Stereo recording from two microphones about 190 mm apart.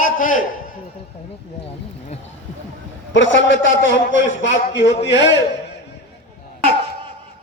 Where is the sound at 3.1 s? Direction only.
75° left (ahead or behind).